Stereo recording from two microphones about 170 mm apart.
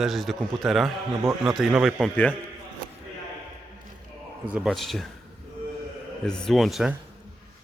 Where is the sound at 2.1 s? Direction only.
10° left (ahead or behind).